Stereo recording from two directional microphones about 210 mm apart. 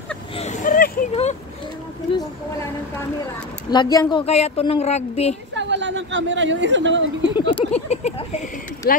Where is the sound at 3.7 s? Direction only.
20° left (ahead or behind).